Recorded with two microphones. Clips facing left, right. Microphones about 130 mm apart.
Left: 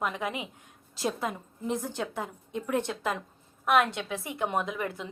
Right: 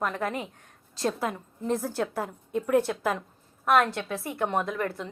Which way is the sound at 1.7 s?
Centre (ahead or behind).